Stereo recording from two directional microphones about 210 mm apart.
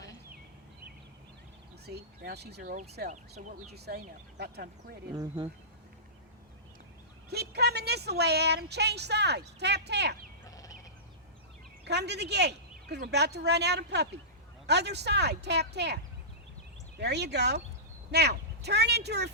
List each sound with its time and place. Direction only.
1.9 s speech: 50° right (ahead or behind)
3.1 s speech: 35° right (ahead or behind)
4.4 s speech: 50° right (ahead or behind)
5.1 s speech: 20° right (ahead or behind)
7.3 s speech: 50° right (ahead or behind)
10.4 s a sound: 15° left (ahead or behind)
11.9 s speech: 55° right (ahead or behind)
17.0 s speech: 55° right (ahead or behind)